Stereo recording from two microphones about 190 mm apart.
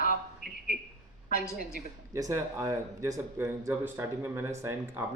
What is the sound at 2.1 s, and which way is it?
Speech, 15° right (ahead or behind).